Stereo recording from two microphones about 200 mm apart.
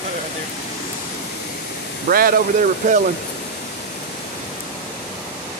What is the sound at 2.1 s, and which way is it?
Speech, 45° right (ahead or behind).